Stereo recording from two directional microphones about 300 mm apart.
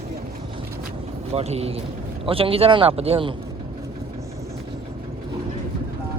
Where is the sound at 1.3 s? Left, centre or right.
Right.